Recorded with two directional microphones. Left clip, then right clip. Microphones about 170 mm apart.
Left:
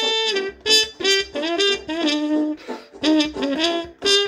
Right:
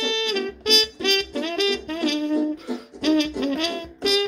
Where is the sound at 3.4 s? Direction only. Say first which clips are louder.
Left 4 dB; 20° left (ahead or behind).